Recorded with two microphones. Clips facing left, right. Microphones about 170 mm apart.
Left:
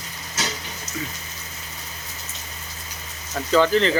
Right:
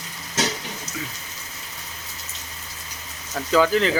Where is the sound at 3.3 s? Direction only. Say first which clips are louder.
Left 1 dB; 5° right (ahead or behind).